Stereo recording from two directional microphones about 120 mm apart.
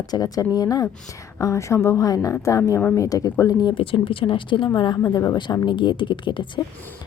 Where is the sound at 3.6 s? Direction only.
40° left (ahead or behind).